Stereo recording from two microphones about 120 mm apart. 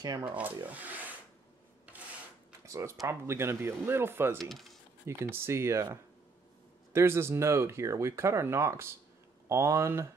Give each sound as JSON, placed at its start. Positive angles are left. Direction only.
{"t": 0.3, "sound": "speech", "side_deg": -15}
{"t": 2.6, "sound": "a sound", "side_deg": -25}
{"t": 3.1, "sound": "speech", "side_deg": -20}
{"t": 4.4, "sound": "speech", "side_deg": 0}
{"t": 5.0, "sound": "speech", "side_deg": -20}
{"t": 6.9, "sound": "speech", "side_deg": -20}